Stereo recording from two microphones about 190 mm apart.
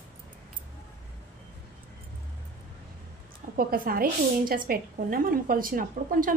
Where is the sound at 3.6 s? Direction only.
50° right (ahead or behind).